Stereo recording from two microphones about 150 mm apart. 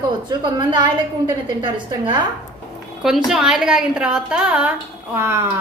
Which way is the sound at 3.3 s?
5° right (ahead or behind).